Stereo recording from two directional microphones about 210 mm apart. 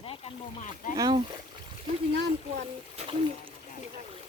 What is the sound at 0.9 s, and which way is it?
Speech, 15° right (ahead or behind).